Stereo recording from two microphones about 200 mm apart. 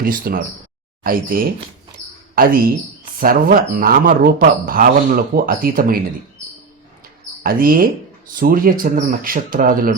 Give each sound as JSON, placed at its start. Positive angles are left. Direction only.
{"t": 0.0, "sound": "speech", "side_deg": -45}
{"t": 7.4, "sound": "speech", "side_deg": -45}